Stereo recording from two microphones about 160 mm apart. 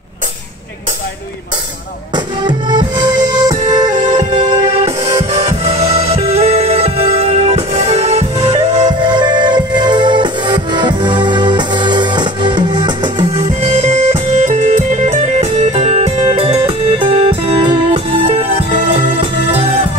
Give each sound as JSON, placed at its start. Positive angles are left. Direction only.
{"t": 2.1, "sound": "music", "side_deg": -30}
{"t": 8.8, "sound": "music", "side_deg": -25}
{"t": 13.4, "sound": "music", "side_deg": -40}